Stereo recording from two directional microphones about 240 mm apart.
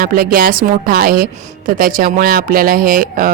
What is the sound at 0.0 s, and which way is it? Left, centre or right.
Speech, right.